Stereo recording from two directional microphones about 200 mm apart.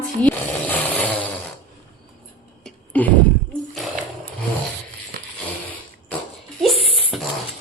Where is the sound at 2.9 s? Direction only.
10° left (ahead or behind).